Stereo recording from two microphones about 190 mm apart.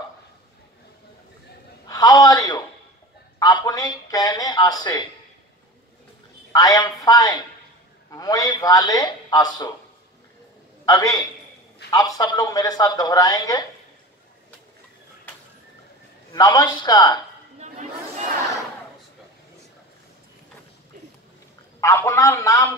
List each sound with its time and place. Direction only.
1.9 s a sound: 20° left (ahead or behind)
6.5 s speech: 20° left (ahead or behind)
10.9 s speech: 20° left (ahead or behind)
16.3 s speech: 20° left (ahead or behind)
21.8 s a man's voice: 15° left (ahead or behind)